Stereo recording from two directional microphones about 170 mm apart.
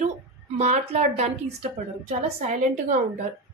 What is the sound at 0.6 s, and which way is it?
A woman's voice, 40° right (ahead or behind).